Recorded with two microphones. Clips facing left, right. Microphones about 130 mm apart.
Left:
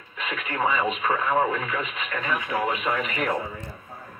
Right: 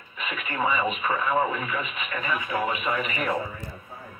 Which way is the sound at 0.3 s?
10° right (ahead or behind).